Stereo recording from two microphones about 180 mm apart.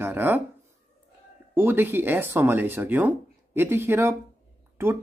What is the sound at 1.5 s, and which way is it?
Speech, 10° right (ahead or behind).